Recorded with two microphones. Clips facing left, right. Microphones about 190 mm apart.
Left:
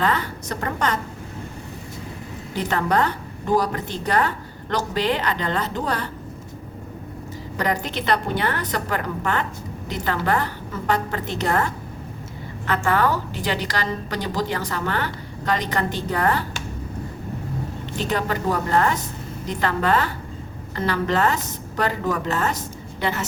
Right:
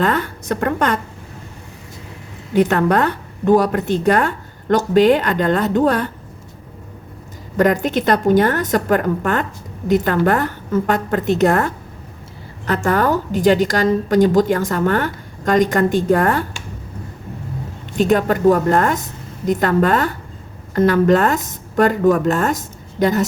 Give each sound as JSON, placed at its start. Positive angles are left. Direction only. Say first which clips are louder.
{"t": 0.0, "sound": "a woman's voice", "louder": "right 5 dB", "side_deg": -50}
{"t": 2.5, "sound": "a woman's voice", "louder": "right 8 dB", "side_deg": -60}
{"t": 7.6, "sound": "a woman's voice", "louder": "right 9 dB", "side_deg": -50}
{"t": 17.9, "sound": "a woman's voice", "louder": "right 9 dB", "side_deg": -50}